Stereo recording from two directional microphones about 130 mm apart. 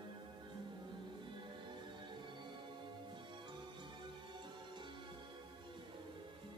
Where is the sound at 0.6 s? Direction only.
35° right (ahead or behind).